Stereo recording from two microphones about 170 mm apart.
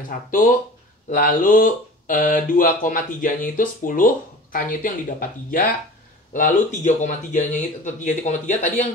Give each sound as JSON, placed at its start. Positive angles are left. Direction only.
{"t": 0.3, "sound": "speech", "side_deg": 50}